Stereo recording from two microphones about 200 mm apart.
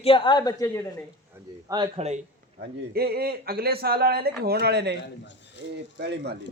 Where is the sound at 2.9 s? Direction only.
50° right (ahead or behind).